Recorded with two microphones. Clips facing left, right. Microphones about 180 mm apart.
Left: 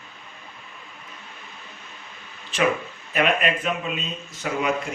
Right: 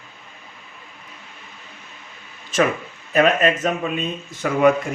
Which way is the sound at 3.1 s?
40° right (ahead or behind).